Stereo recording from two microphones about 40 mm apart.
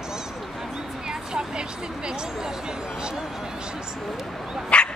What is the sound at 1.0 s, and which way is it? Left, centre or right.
Speech, right.